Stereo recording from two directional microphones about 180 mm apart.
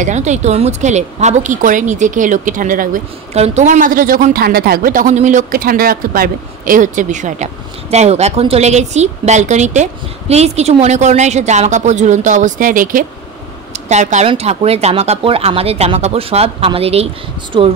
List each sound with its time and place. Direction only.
0.0 s speech: 40° right (ahead or behind)